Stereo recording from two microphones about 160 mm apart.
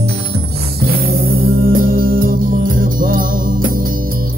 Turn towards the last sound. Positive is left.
turn(degrees=-60)  # may be behind; listen again after turning